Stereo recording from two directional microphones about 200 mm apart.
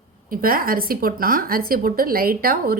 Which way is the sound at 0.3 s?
45° right (ahead or behind).